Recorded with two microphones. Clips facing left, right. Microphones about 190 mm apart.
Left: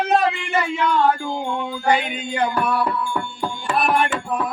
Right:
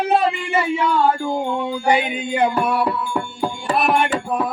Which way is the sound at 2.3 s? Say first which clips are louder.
Right 2 dB; 25° right (ahead or behind).